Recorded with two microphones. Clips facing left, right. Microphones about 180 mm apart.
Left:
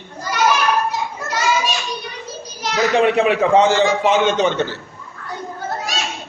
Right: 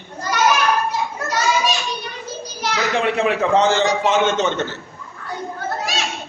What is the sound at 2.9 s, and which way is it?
Speech, 15° left (ahead or behind).